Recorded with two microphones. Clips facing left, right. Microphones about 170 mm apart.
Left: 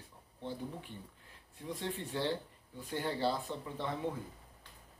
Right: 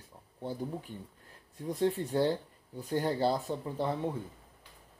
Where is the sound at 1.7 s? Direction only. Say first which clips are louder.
Right 9 dB; 40° right (ahead or behind).